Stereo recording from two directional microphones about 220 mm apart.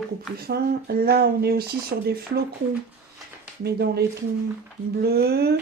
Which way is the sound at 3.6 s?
45° right (ahead or behind).